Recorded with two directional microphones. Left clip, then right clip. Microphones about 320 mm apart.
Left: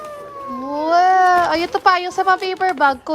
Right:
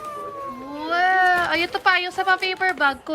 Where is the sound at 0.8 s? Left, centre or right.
Centre.